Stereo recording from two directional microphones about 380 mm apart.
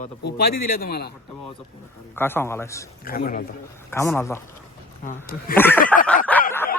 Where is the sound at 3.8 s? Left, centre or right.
Centre.